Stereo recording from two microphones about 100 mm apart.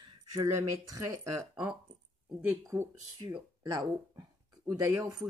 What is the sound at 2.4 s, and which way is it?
Speech, 25° right (ahead or behind).